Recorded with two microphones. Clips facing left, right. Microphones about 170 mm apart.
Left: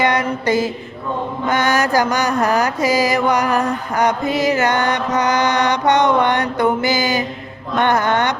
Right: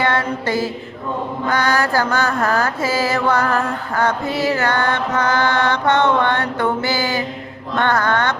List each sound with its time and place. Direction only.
0.0 s mantra: 20° left (ahead or behind)
7.8 s speech: 20° left (ahead or behind)